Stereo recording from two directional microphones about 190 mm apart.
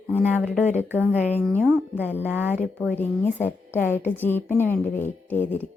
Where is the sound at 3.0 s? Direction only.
10° left (ahead or behind).